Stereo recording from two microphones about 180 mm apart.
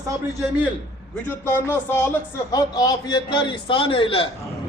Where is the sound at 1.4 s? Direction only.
15° left (ahead or behind).